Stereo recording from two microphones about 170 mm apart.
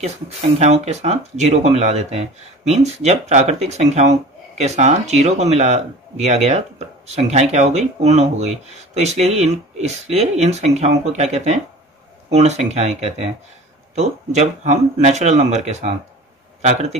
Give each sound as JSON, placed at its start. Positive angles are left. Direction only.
{"t": 0.6, "sound": "speech", "side_deg": -40}